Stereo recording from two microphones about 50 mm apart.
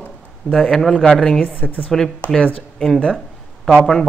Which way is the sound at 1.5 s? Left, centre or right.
Left.